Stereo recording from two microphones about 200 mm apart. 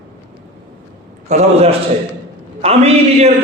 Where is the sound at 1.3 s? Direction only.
35° right (ahead or behind).